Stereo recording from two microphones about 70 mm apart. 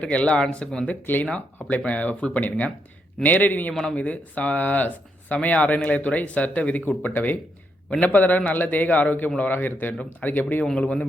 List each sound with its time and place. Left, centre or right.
0.0 s speech: centre
1.0 s speech: left